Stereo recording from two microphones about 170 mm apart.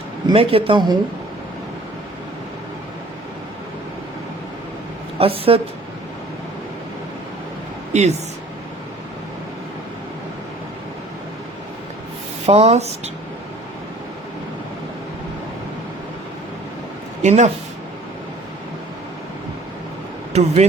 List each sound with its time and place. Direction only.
0.3 s speech: 35° right (ahead or behind)
5.1 s a woman's voice: 35° right (ahead or behind)
7.9 s speech: 40° right (ahead or behind)
12.5 s speech: 40° right (ahead or behind)
17.2 s speech: 45° right (ahead or behind)
20.3 s speech: 40° right (ahead or behind)